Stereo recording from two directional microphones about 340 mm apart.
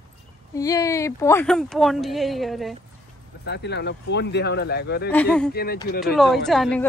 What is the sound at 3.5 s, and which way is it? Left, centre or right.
Speech, left.